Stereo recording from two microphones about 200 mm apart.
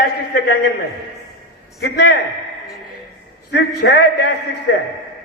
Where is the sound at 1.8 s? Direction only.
55° left (ahead or behind).